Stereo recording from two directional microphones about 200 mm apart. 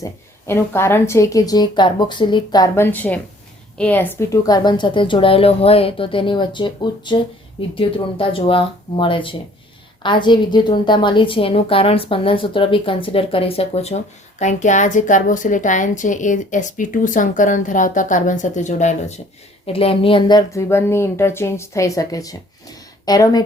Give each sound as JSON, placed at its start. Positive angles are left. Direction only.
{"t": 0.0, "sound": "a woman's voice", "side_deg": 10}